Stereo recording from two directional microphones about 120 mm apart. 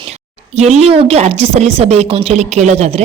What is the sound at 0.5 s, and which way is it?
Speech, 65° right (ahead or behind).